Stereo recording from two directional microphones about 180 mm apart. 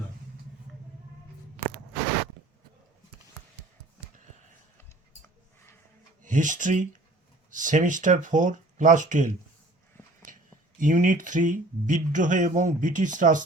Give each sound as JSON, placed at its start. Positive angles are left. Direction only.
{"t": 6.2, "sound": "speech", "side_deg": -45}
{"t": 10.8, "sound": "speech", "side_deg": -45}